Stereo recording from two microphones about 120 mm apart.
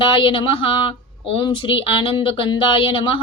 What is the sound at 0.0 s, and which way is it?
Speech, 45° left (ahead or behind).